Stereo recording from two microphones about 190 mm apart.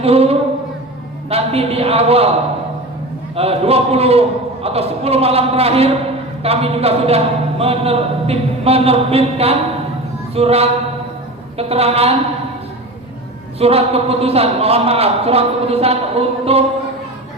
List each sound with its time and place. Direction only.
0.0 s a man's voice: 30° right (ahead or behind)
3.3 s a man's voice: 30° right (ahead or behind)
13.6 s a man's voice: 30° right (ahead or behind)